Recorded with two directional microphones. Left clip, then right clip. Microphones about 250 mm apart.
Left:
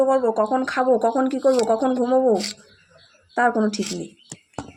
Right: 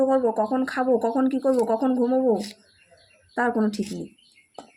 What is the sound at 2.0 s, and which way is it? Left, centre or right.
Speech, left.